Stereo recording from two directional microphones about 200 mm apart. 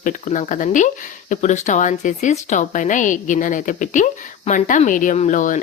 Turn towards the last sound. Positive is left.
turn(degrees=40)  # may be behind; listen again after turning